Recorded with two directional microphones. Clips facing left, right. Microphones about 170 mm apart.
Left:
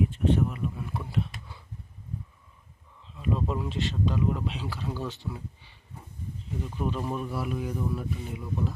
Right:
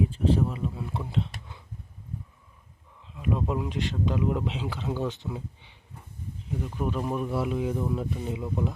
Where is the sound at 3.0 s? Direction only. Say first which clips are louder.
Right 1 dB; 15° right (ahead or behind).